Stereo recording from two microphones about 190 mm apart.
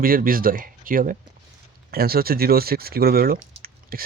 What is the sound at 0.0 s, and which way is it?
Speech, 50° right (ahead or behind).